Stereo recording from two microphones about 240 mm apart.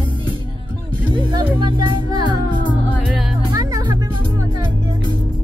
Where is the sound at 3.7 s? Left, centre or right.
Centre.